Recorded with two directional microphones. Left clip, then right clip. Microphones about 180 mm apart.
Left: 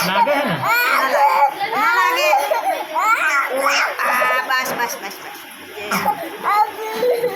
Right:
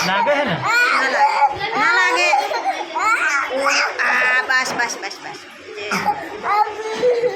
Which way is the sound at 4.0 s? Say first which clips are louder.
Right 1 dB; 35° right (ahead or behind).